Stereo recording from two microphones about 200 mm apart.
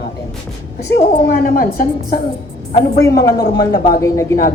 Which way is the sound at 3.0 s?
15° left (ahead or behind).